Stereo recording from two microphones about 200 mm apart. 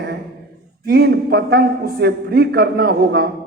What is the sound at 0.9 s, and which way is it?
A man's voice, 50° right (ahead or behind).